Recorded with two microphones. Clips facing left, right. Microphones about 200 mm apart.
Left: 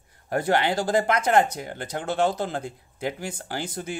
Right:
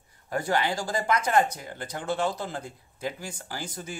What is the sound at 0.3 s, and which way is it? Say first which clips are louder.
Speech: left 4 dB; 65° left (ahead or behind).